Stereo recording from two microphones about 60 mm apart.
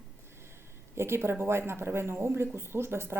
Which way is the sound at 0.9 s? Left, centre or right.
Right.